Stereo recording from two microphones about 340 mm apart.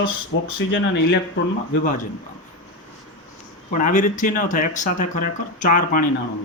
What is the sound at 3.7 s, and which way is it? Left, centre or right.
Speech, left.